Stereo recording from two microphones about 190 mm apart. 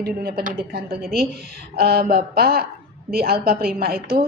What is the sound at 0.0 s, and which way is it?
A woman's voice, 55° right (ahead or behind).